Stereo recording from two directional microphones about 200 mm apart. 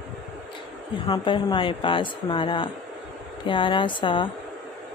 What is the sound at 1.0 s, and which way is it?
Speech, 25° left (ahead or behind).